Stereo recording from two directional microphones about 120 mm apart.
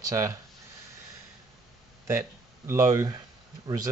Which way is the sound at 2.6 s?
25° right (ahead or behind).